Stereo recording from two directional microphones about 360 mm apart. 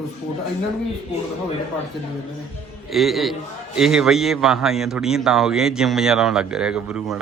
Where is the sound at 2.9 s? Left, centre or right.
Centre.